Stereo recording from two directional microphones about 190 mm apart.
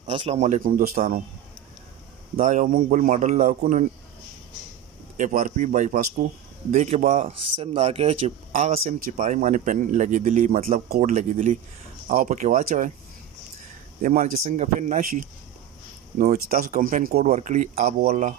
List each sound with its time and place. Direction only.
0.0 s speech: 30° right (ahead or behind); by 1.2 s 50° right (ahead or behind)
2.3 s speech: 45° right (ahead or behind)
5.1 s speech: 40° right (ahead or behind)
14.0 s speech: 40° right (ahead or behind)